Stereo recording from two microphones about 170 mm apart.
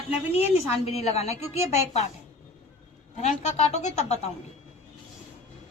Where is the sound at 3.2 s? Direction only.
40° left (ahead or behind).